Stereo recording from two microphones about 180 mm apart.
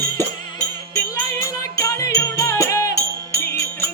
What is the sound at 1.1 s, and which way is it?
Music, 15° left (ahead or behind).